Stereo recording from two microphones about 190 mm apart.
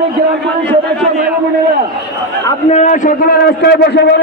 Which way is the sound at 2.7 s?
40° left (ahead or behind).